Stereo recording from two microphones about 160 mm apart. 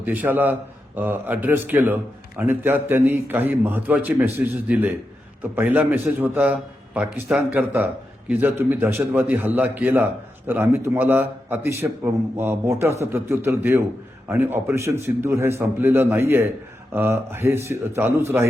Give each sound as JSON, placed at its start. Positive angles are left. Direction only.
{"t": 0.0, "sound": "a man's voice", "side_deg": -10}